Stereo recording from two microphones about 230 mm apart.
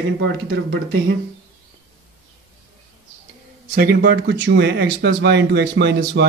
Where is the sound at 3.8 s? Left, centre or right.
Right.